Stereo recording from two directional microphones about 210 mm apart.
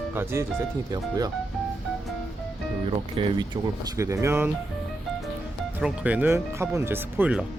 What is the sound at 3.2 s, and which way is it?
Speech, 20° right (ahead or behind).